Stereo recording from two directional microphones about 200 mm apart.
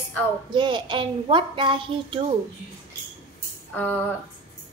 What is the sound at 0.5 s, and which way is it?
A woman's voice, 25° right (ahead or behind).